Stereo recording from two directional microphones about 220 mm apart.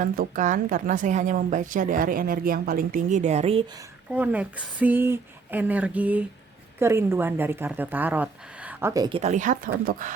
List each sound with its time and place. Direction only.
0.0 s a woman's voice: 40° right (ahead or behind)
4.1 s speech: 5° right (ahead or behind); by 10.1 s 40° right (ahead or behind)